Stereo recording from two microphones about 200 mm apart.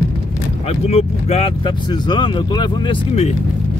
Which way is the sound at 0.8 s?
30° left (ahead or behind).